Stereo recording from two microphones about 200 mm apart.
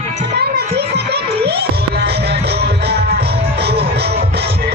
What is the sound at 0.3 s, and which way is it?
Music, 55° right (ahead or behind).